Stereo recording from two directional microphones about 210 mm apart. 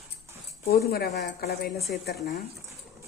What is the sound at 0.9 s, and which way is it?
Speech, 45° left (ahead or behind).